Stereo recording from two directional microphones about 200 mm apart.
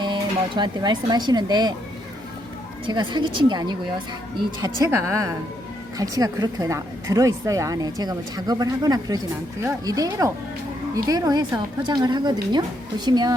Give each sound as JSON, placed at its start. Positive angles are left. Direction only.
{"t": 0.0, "sound": "a woman's voice", "side_deg": -25}
{"t": 2.8, "sound": "a woman's voice", "side_deg": -25}